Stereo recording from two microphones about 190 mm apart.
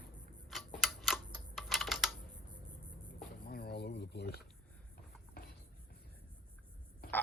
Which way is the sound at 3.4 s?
55° left (ahead or behind).